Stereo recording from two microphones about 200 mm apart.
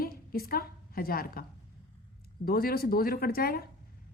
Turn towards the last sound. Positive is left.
turn(degrees=50)  # may be behind; listen again after turning